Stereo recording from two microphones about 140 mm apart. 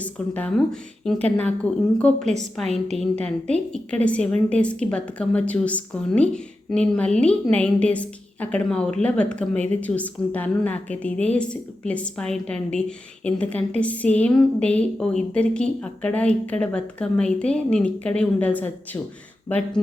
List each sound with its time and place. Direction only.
0.0 s a woman's voice: 10° left (ahead or behind)